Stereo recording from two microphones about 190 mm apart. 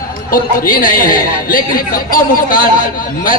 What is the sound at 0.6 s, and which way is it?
A man's voice, 45° left (ahead or behind).